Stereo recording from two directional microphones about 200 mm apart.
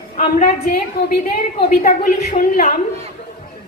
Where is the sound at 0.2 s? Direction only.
40° left (ahead or behind).